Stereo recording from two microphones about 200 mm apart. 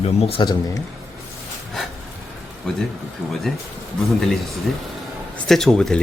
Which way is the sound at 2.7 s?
5° left (ahead or behind).